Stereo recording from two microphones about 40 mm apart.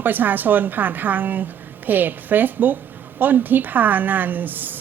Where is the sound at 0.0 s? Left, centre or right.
Right.